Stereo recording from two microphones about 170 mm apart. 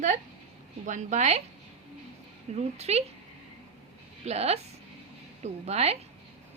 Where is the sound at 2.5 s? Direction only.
40° right (ahead or behind).